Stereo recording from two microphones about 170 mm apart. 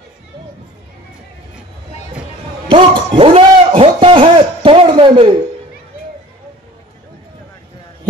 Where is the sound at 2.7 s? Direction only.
30° right (ahead or behind).